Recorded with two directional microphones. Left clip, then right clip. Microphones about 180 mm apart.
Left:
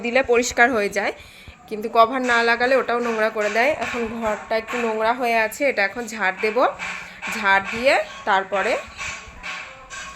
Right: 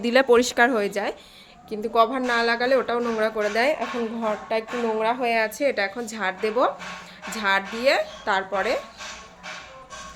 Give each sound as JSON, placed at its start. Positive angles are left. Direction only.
{"t": 0.0, "sound": "speech", "side_deg": -40}
{"t": 0.5, "sound": "a woman's voice", "side_deg": -15}